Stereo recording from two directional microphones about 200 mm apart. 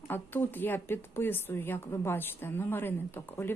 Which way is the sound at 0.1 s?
10° left (ahead or behind).